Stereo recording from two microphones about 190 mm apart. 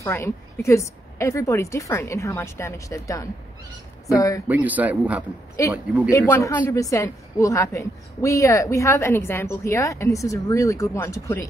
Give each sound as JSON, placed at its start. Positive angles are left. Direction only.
{"t": 0.0, "sound": "a woman's voice", "side_deg": 15}
{"t": 4.5, "sound": "speech", "side_deg": -10}
{"t": 5.6, "sound": "a woman's voice", "side_deg": 15}